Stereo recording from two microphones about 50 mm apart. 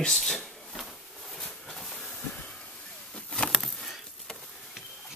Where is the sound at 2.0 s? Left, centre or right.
Left.